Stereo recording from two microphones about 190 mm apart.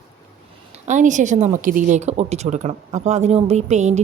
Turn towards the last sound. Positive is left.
turn(degrees=-35)  # may be behind; listen again after turning